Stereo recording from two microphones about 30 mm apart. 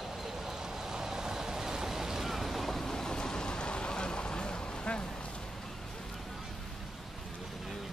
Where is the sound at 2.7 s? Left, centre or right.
Centre; by 5.1 s left.